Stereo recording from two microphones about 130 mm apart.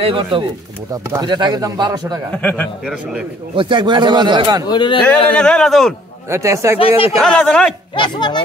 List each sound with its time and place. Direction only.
0.0 s speech: 40° right (ahead or behind)
2.3 s a man's voice: 10° left (ahead or behind)
3.5 s speech: 40° right (ahead or behind)
4.6 s speech: 35° left (ahead or behind)
5.3 s a man's voice: 5° left (ahead or behind)
6.3 s speech: 25° right (ahead or behind)
6.8 s speech: 45° left (ahead or behind)
7.2 s a man's voice: 5° left (ahead or behind)
7.9 s speech: 35° left (ahead or behind)